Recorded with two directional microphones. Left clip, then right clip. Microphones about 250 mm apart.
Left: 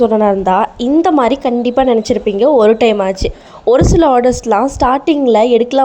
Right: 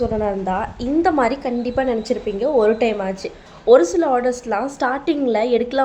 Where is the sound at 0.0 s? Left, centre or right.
Left.